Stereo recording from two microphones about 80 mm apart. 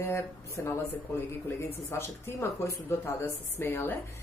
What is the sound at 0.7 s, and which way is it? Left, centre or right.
Speech, left.